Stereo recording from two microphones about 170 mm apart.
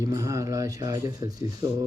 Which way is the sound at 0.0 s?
20° right (ahead or behind).